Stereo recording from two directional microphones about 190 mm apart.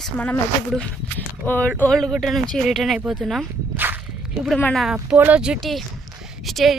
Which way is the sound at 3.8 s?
10° right (ahead or behind).